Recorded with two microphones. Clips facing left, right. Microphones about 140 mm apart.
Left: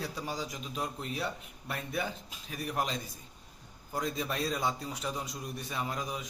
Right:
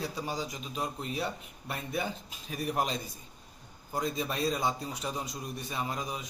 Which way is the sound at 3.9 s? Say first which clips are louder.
Right 1 dB; 10° right (ahead or behind).